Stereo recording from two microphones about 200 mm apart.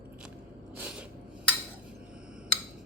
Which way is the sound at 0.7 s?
5° right (ahead or behind).